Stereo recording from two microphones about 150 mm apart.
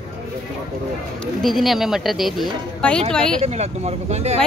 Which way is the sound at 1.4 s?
Centre (ahead or behind).